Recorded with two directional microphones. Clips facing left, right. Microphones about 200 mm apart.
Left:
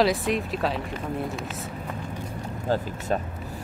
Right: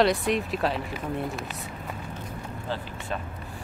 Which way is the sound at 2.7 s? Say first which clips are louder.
Left 8 dB; 40° left (ahead or behind).